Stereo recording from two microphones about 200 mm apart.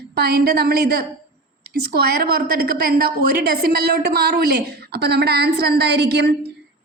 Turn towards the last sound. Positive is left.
turn(degrees=-55)  # may be behind; listen again after turning